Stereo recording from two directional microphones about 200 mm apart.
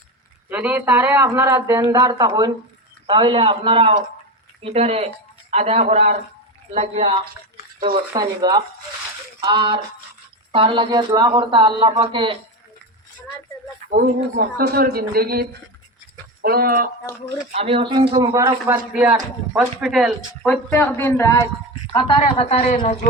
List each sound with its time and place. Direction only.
0.5 s speech: 10° right (ahead or behind); by 7.2 s 30° right (ahead or behind)
8.1 s speech: 20° right (ahead or behind)
13.9 s speech: 50° right (ahead or behind)
17.5 s speech: 30° right (ahead or behind)
19.5 s a woman's voice: centre (ahead or behind); by 22.8 s 35° left (ahead or behind)